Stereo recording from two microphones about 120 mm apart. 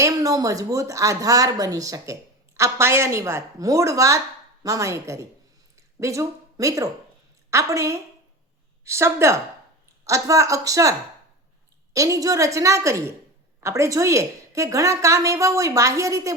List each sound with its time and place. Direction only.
0.0 s a woman's voice: 30° right (ahead or behind)
11.9 s a woman's voice: 25° right (ahead or behind)